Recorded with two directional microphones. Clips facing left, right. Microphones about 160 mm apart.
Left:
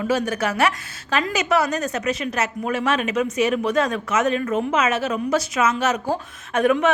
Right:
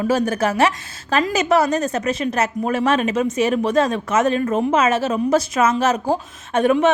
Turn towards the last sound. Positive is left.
turn(degrees=-25)  # may be behind; listen again after turning